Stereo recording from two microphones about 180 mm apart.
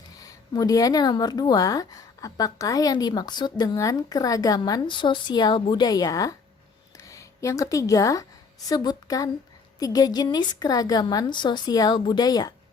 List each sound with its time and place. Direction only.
0.2 s a woman's voice: 20° left (ahead or behind)